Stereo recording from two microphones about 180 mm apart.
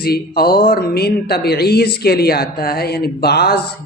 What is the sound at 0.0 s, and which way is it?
Speech, 60° left (ahead or behind).